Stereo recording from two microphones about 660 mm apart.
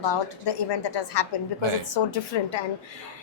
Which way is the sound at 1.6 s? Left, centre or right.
Right.